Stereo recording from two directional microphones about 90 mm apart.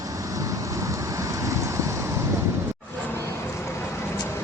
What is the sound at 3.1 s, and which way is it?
Vehicle, 30° left (ahead or behind).